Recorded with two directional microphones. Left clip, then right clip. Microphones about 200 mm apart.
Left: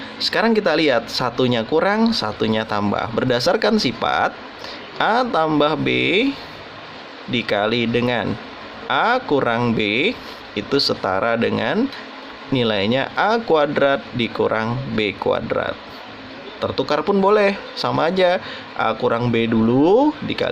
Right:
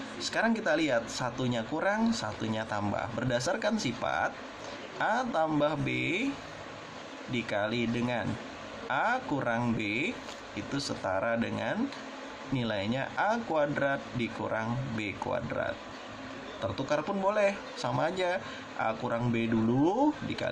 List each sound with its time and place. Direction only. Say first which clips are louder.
0.2 s speech: left 12 dB; 50° left (ahead or behind)
7.3 s speech: left 12 dB; 45° left (ahead or behind)